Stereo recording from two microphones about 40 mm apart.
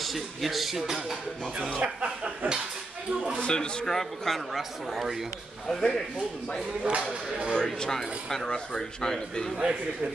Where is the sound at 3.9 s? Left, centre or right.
Centre.